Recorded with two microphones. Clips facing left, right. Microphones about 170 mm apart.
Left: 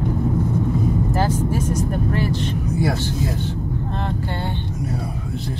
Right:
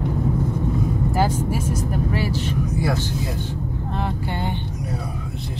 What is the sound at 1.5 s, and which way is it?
Vehicle, 10° right (ahead or behind).